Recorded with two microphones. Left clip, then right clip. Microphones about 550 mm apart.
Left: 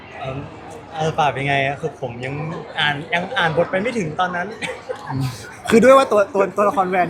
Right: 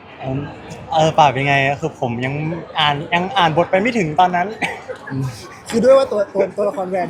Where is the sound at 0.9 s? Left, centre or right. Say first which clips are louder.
Right 6 dB; right.